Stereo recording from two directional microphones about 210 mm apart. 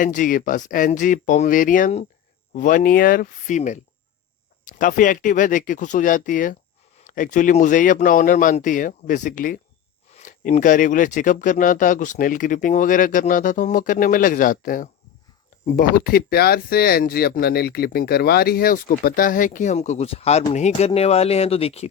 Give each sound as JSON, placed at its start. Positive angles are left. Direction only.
{"t": 0.0, "sound": "speech", "side_deg": 40}